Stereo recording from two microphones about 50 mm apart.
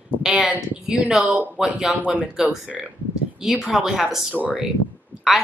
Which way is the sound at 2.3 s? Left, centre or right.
Centre.